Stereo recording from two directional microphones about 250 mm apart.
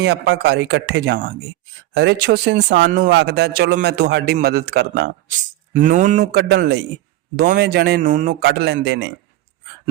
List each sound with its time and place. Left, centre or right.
0.0 s a man's voice: right
5.7 s a man's voice: right